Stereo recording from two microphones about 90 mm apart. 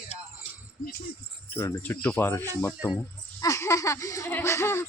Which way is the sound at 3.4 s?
35° left (ahead or behind).